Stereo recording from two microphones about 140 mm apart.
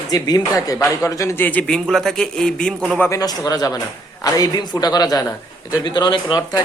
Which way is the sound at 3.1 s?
25° left (ahead or behind).